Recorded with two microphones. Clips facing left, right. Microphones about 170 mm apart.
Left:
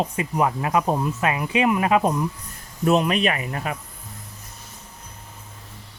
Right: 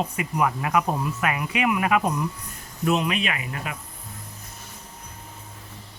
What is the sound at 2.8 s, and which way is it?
Speech, 40° left (ahead or behind).